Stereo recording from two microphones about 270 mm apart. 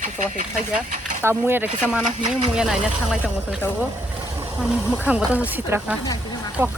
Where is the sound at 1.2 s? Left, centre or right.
Centre.